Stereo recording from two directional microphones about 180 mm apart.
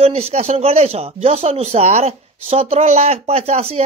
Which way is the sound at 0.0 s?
35° right (ahead or behind).